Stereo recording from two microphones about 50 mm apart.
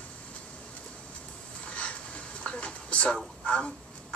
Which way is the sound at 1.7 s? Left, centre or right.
Left.